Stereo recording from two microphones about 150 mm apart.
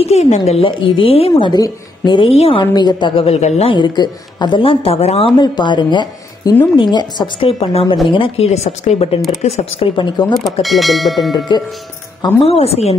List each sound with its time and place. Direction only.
0.0 s a woman's voice: 45° left (ahead or behind)
2.7 s a woman's voice: 30° left (ahead or behind); by 3.7 s 45° left (ahead or behind)
3.7 s a woman's voice: 30° left (ahead or behind)
5.4 s a woman's voice: 30° left (ahead or behind); by 9.6 s 50° left (ahead or behind)
10.2 s speech: 25° left (ahead or behind)
10.6 s speech: centre (ahead or behind)
11.3 s speech: 30° left (ahead or behind)
12.4 s a woman's voice: 40° left (ahead or behind)